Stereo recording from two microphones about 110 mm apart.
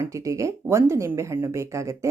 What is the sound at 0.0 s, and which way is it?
Speech, 30° right (ahead or behind).